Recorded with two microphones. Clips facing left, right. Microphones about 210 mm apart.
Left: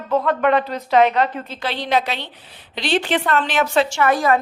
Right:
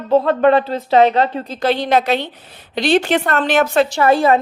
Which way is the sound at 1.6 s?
45° right (ahead or behind).